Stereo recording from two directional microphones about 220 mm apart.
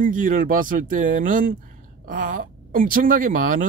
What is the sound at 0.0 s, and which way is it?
Speech, 35° right (ahead or behind).